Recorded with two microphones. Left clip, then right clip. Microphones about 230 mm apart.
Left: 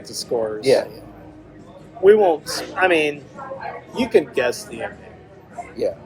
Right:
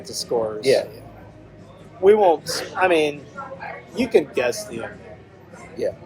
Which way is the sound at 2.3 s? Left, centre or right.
Centre.